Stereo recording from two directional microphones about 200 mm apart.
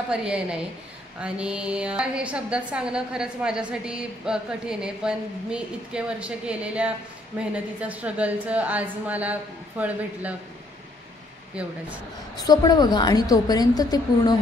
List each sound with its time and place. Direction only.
0.1 s a woman's voice: 5° right (ahead or behind)
12.4 s a woman's voice: 20° left (ahead or behind)